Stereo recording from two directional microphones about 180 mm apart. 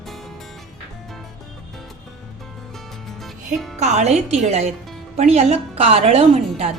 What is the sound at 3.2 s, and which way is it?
Music, centre (ahead or behind).